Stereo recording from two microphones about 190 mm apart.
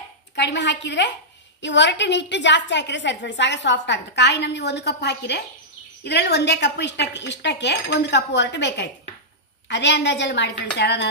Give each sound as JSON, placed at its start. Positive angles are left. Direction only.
{"t": 0.4, "sound": "a woman's voice", "side_deg": 65}